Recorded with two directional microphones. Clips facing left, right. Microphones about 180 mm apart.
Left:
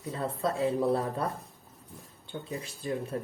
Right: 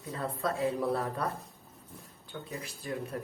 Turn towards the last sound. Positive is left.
turn(degrees=25)  # may be behind; listen again after turning